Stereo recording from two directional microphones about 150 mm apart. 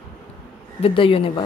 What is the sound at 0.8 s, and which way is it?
Speech, 40° left (ahead or behind).